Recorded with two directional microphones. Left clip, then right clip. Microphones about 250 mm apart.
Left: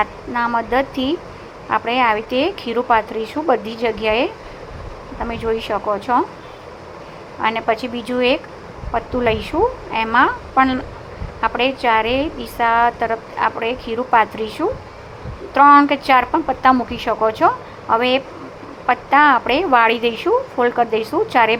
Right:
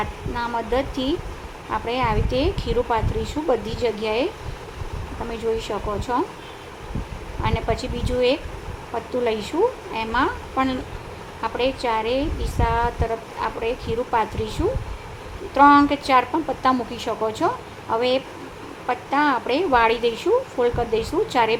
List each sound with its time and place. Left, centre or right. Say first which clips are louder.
0.3 s a woman's voice: left 6 dB; centre
5.3 s a woman's voice: left 4 dB; centre
7.4 s a woman's voice: left 6 dB; centre